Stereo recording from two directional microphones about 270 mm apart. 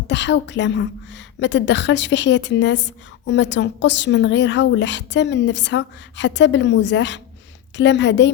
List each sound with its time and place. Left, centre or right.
0.1 s a woman's voice: left